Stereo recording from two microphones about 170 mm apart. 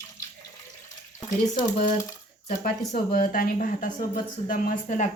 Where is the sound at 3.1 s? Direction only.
60° left (ahead or behind).